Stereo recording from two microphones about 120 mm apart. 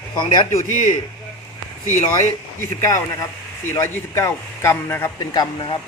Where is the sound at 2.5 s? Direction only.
25° left (ahead or behind).